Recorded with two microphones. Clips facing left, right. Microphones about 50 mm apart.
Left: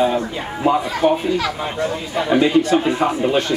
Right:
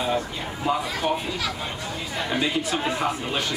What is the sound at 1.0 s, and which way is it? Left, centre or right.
Speech, centre.